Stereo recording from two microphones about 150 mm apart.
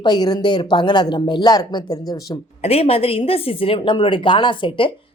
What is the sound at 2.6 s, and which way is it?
A woman's voice, 45° left (ahead or behind).